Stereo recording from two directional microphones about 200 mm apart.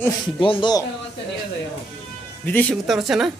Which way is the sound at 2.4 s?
10° left (ahead or behind).